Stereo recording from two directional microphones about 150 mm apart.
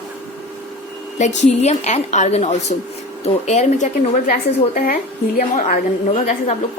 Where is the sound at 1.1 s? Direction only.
50° left (ahead or behind).